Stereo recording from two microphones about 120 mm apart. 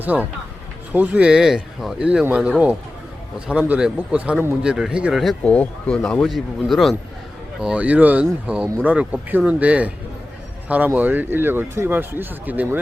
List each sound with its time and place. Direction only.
0.0 s speech: 15° right (ahead or behind)
5.4 s speech: 10° left (ahead or behind)
7.6 s speech: 10° right (ahead or behind)